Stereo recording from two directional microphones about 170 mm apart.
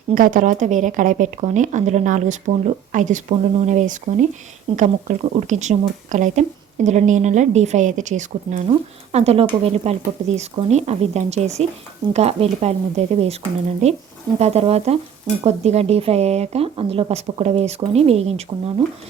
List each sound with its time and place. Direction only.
0.1 s speech: 55° right (ahead or behind); by 13.3 s 40° right (ahead or behind)
14.3 s speech: 40° right (ahead or behind)